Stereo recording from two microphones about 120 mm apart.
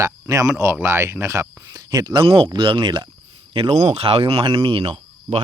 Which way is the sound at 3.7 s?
60° right (ahead or behind).